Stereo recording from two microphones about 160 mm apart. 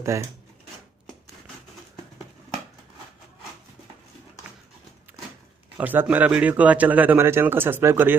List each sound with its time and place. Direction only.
0.0 s a man's voice: 20° right (ahead or behind)
5.8 s a man's voice: 10° right (ahead or behind)